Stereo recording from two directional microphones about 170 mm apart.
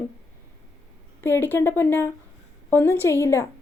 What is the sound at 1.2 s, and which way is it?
A woman's voice, 15° left (ahead or behind).